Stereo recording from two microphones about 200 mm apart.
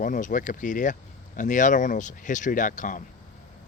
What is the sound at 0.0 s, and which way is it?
Speech, 40° left (ahead or behind).